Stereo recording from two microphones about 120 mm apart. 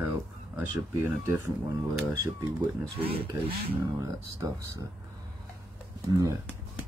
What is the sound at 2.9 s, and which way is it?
Speech, 55° right (ahead or behind).